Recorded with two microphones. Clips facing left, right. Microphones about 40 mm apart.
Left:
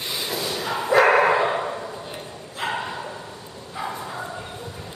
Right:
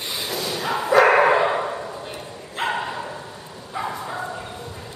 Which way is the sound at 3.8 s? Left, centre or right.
Centre.